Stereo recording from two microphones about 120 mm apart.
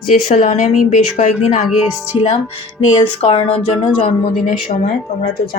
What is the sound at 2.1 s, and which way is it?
Speech, 50° left (ahead or behind).